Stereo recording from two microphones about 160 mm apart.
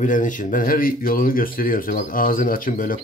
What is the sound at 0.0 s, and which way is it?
Speech, 55° left (ahead or behind).